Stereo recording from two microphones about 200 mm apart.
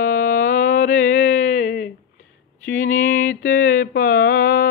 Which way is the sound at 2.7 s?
45° left (ahead or behind).